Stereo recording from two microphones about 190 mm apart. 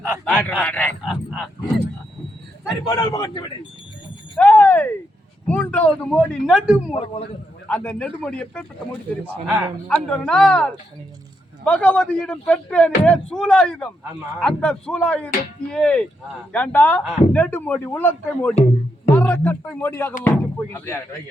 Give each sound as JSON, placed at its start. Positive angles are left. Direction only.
{"t": 0.0, "sound": "speech", "side_deg": -10}
{"t": 0.6, "sound": "speech", "side_deg": 10}
{"t": 2.6, "sound": "a man's voice", "side_deg": 20}
{"t": 4.4, "sound": "a man's voice", "side_deg": 10}
{"t": 9.2, "sound": "speech", "side_deg": -10}
{"t": 9.9, "sound": "a man's voice", "side_deg": 5}
{"t": 18.5, "sound": "music", "side_deg": 35}
{"t": 19.1, "sound": "speech", "side_deg": 10}